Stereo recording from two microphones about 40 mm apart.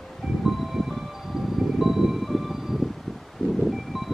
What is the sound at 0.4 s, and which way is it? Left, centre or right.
Music, centre.